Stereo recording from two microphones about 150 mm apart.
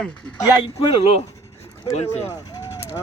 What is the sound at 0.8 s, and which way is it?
Speech, 40° left (ahead or behind).